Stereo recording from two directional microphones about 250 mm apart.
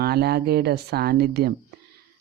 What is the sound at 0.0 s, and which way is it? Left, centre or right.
Speech, right.